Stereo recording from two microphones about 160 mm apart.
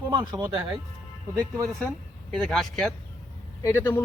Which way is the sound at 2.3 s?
5° left (ahead or behind).